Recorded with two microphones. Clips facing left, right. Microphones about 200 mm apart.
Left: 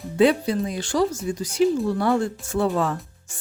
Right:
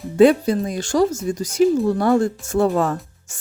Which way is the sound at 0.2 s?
45° right (ahead or behind).